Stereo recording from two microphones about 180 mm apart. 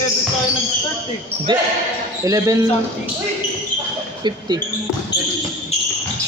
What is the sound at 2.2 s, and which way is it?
Speech, 20° right (ahead or behind).